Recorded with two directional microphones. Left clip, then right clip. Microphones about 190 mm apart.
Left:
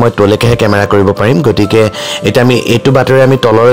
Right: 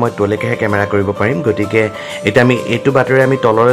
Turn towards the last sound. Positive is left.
turn(degrees=35)  # may be behind; listen again after turning